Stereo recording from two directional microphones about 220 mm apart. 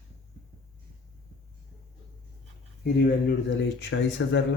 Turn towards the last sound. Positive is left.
turn(degrees=55)  # may be behind; listen again after turning